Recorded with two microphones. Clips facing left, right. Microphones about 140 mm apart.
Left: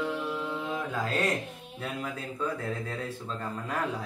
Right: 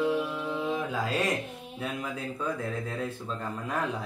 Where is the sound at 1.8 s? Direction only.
10° right (ahead or behind).